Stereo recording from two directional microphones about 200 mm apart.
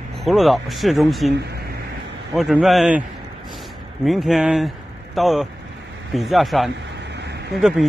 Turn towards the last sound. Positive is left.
turn(degrees=0)  # may be behind; listen again after turning